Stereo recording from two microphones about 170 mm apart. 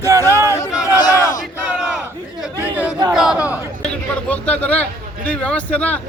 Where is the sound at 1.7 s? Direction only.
5° right (ahead or behind).